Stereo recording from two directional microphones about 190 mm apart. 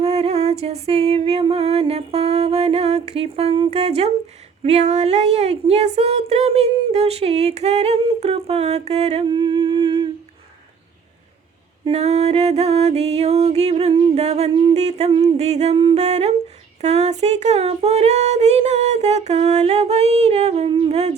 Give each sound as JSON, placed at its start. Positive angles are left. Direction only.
{"t": 0.0, "sound": "speech", "side_deg": -35}
{"t": 11.9, "sound": "speech", "side_deg": -35}